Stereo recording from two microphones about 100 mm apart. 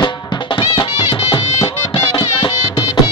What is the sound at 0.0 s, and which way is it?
Music, 60° left (ahead or behind).